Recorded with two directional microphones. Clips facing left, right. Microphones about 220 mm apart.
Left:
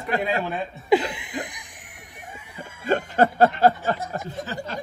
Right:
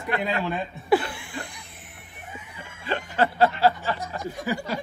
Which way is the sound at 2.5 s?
45° left (ahead or behind).